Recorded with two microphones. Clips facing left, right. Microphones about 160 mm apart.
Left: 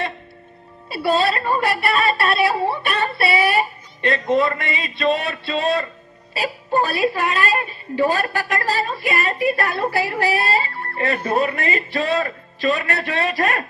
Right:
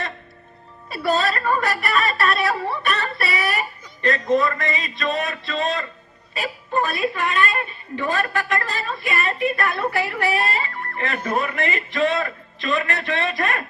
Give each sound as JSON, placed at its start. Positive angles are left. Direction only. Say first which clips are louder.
{"t": 0.9, "sound": "a woman's voice", "louder": "left 3 dB", "side_deg": 30}